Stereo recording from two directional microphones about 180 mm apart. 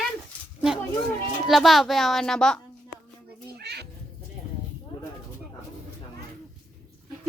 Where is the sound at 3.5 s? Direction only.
65° right (ahead or behind).